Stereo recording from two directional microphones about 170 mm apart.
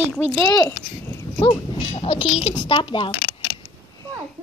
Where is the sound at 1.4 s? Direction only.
30° left (ahead or behind).